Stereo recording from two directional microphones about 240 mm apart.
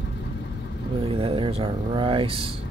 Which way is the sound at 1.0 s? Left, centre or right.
Right.